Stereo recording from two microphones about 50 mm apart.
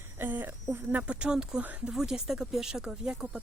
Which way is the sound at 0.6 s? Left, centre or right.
Right.